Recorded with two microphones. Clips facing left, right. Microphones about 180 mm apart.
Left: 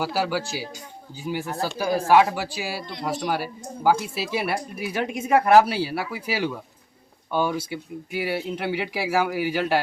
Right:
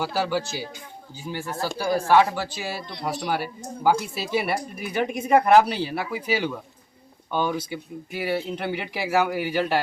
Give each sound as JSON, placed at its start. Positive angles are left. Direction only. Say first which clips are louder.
{"t": 0.0, "sound": "speech", "louder": "even", "side_deg": 5}